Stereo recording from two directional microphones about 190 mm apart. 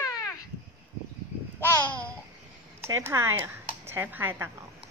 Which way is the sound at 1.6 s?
10° left (ahead or behind).